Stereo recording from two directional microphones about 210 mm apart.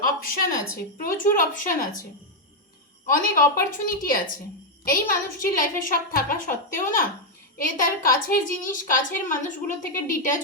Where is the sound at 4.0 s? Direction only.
45° left (ahead or behind).